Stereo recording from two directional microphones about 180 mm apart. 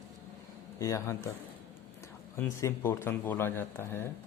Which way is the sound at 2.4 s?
10° left (ahead or behind).